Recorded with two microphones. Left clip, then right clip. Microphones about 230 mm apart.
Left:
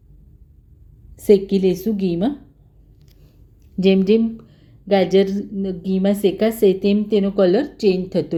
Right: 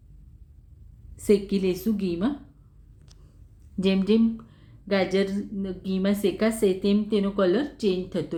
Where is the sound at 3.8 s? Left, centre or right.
Centre.